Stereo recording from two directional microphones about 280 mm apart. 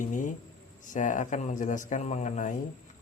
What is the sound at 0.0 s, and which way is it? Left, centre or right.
Speech, left.